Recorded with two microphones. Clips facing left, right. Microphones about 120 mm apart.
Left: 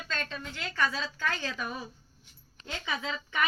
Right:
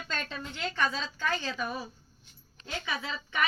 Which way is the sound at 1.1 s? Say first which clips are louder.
Right 1 dB; 20° right (ahead or behind).